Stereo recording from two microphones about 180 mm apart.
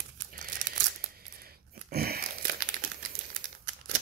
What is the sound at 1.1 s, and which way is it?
Crumpling, 60° right (ahead or behind).